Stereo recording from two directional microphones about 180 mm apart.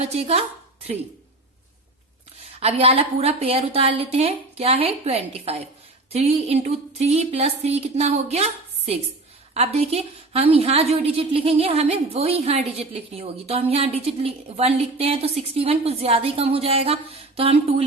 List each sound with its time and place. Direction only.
0.0 s a woman's voice: 35° right (ahead or behind)
2.6 s a woman's voice: 35° right (ahead or behind)